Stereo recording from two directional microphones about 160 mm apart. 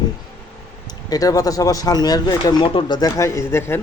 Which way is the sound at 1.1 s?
20° left (ahead or behind).